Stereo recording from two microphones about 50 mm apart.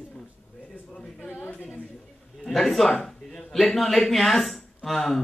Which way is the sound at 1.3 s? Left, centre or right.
Left.